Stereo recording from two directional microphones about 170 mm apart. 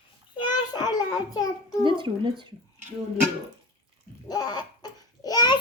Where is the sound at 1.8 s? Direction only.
30° right (ahead or behind).